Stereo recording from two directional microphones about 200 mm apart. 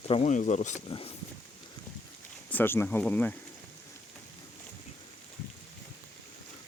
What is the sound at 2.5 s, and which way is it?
Speech, 10° left (ahead or behind).